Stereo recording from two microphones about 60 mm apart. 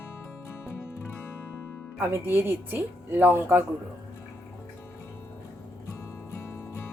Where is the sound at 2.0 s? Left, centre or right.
Right.